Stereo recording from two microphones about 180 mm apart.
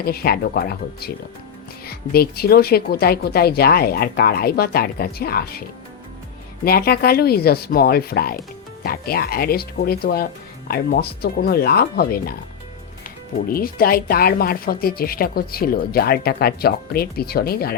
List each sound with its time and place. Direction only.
0.0 s speech: 60° left (ahead or behind)
6.7 s speech: 60° left (ahead or behind)
13.5 s speech: 55° left (ahead or behind)